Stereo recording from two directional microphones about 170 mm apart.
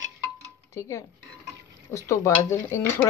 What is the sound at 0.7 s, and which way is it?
Speech, 15° left (ahead or behind).